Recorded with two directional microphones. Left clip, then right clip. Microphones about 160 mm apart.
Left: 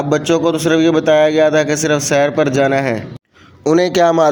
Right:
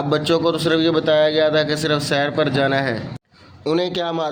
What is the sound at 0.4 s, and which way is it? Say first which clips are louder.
A man's voice: left 4 dB; 5° left (ahead or behind).